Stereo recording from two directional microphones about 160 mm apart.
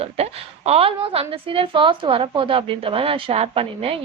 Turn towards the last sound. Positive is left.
turn(degrees=-35)  # may be behind; listen again after turning